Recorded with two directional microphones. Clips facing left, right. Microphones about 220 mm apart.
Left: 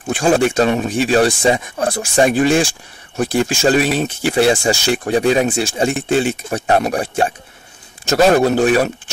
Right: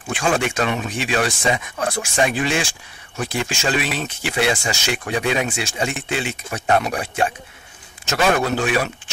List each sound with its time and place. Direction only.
0.1 s speech: 35° left (ahead or behind)
5.9 s speech: 50° left (ahead or behind)
6.5 s speech: 35° left (ahead or behind)